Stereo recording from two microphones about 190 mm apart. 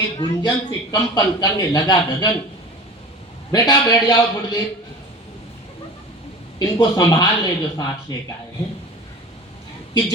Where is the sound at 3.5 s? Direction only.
20° left (ahead or behind).